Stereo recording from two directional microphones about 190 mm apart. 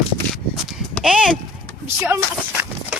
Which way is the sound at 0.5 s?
Centre (ahead or behind).